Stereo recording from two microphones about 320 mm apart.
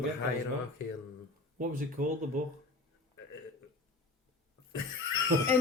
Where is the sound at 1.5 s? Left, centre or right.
Right.